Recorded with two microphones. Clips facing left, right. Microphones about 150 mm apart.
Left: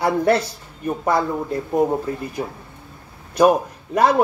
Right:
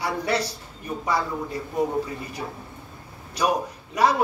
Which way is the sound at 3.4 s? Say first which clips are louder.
Left 9 dB; 50° left (ahead or behind).